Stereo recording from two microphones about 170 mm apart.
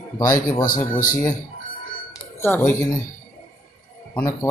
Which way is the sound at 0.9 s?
50° left (ahead or behind).